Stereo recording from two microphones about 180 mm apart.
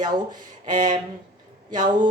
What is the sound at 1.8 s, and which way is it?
Speech, 25° right (ahead or behind).